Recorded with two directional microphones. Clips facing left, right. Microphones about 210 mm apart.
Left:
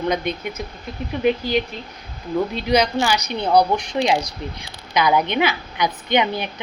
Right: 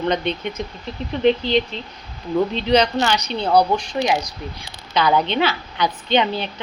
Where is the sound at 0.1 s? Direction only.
10° left (ahead or behind).